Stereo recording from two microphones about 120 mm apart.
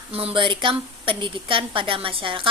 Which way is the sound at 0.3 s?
45° right (ahead or behind).